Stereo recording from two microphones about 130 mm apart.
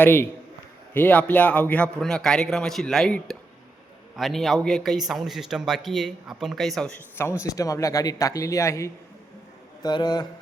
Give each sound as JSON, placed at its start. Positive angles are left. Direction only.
{"t": 0.0, "sound": "a man's voice", "side_deg": 15}
{"t": 7.4, "sound": "speech", "side_deg": 25}